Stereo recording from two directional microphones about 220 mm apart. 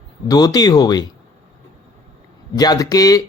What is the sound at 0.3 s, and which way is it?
Speech, 15° left (ahead or behind).